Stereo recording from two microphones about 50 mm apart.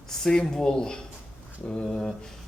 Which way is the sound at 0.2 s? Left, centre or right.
Centre.